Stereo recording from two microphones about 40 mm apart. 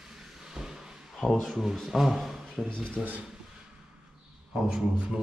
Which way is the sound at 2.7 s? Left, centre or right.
Left.